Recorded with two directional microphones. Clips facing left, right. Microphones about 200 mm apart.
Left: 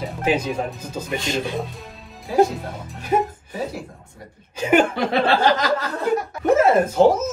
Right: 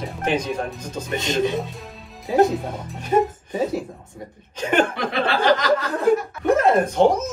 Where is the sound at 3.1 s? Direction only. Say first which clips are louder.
Right 2 dB; 10° left (ahead or behind).